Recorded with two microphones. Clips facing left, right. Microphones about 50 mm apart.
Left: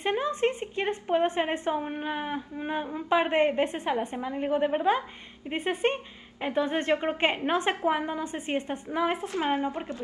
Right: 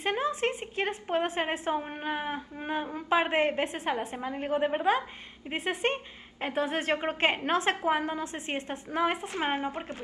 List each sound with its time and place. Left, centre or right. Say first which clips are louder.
0.0 s a woman's voice: left 2 dB; centre
1.8 s a woman's voice: left 2 dB; centre
8.2 s a woman's voice: left 3 dB; centre
9.3 s speech: left 3 dB; right